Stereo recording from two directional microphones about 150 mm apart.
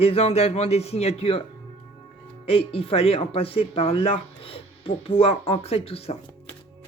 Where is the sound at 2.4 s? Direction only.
40° left (ahead or behind).